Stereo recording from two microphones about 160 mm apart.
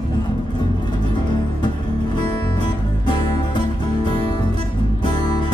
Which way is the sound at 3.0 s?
30° left (ahead or behind).